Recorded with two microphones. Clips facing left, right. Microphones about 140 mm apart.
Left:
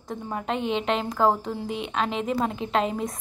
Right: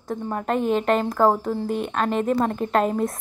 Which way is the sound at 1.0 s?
5° right (ahead or behind).